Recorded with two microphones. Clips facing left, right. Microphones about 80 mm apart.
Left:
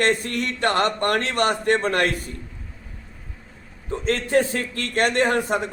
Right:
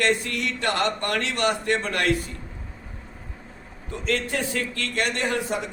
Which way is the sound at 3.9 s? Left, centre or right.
Left.